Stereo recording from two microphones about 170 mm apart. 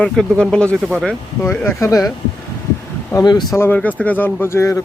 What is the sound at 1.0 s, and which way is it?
Speech, 10° left (ahead or behind).